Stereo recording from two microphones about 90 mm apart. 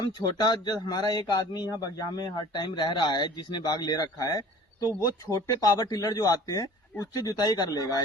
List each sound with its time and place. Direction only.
0.0 s a man's voice: 50° left (ahead or behind)